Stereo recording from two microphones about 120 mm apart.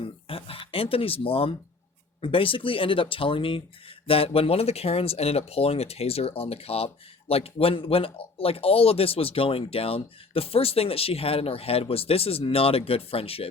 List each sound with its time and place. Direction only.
0.0 s speech: 50° left (ahead or behind)